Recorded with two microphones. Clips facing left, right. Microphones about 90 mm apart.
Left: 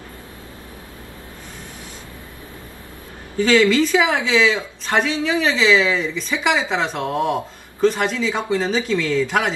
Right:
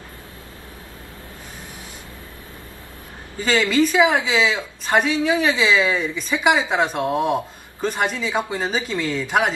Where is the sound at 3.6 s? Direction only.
15° right (ahead or behind).